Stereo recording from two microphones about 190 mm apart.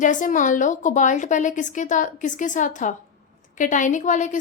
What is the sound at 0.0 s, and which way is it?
A woman's voice, 40° left (ahead or behind).